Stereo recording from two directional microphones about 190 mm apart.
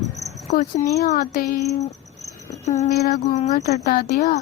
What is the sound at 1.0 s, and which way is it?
Speech, 55° left (ahead or behind).